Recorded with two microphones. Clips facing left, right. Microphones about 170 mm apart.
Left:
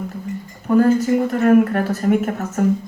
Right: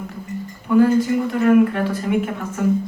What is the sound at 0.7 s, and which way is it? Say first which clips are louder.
Speech: left 1 dB; 40° left (ahead or behind).